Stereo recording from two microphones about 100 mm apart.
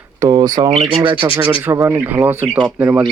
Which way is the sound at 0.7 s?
75° right (ahead or behind).